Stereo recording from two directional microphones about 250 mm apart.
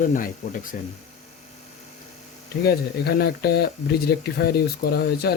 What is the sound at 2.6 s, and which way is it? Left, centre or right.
Speech, left.